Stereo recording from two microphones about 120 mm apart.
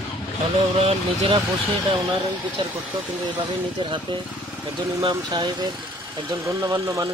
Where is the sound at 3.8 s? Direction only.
40° right (ahead or behind).